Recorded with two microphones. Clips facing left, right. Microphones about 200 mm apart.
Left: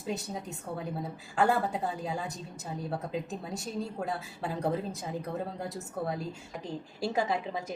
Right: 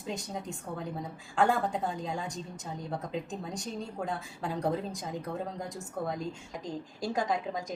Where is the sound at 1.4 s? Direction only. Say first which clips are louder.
Even; 5° left (ahead or behind).